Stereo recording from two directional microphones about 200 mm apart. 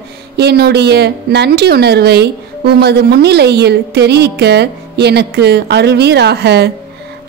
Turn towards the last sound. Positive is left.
turn(degrees=-55)  # may be behind; listen again after turning